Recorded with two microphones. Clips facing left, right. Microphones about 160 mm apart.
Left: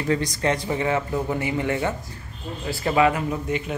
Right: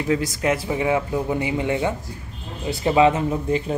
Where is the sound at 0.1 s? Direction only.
5° right (ahead or behind).